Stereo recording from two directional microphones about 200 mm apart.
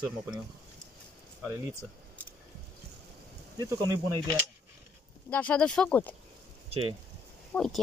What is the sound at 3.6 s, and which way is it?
Speech, 15° right (ahead or behind).